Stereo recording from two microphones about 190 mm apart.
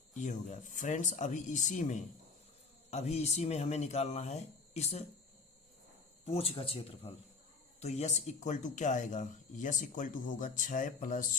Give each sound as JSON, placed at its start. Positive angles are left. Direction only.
{"t": 0.1, "sound": "speech", "side_deg": 40}
{"t": 6.2, "sound": "speech", "side_deg": 30}